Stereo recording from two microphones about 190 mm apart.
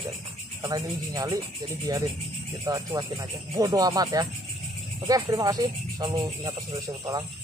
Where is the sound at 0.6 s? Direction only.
20° right (ahead or behind).